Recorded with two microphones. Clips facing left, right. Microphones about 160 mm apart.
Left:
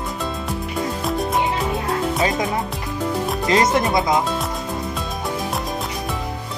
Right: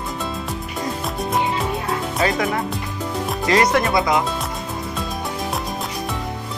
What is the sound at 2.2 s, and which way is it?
Speech, 20° left (ahead or behind).